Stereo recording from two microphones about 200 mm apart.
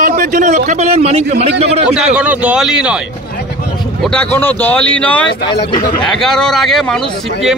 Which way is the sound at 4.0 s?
5° left (ahead or behind).